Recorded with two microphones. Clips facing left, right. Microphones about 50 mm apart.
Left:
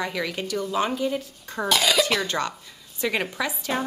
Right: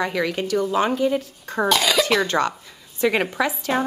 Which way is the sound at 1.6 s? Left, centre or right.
Centre.